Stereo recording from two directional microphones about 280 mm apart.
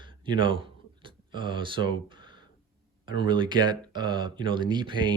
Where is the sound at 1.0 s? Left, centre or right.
Centre.